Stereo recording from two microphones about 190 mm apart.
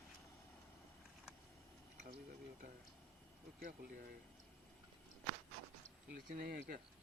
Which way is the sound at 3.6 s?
55° right (ahead or behind).